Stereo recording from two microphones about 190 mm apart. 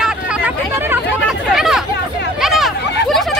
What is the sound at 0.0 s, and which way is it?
Hubbub, 5° right (ahead or behind).